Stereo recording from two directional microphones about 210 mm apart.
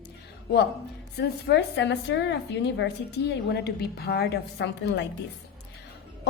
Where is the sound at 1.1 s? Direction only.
50° left (ahead or behind).